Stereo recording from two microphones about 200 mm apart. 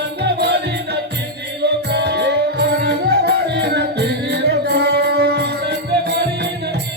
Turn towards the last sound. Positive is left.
turn(degrees=-55)  # may be behind; listen again after turning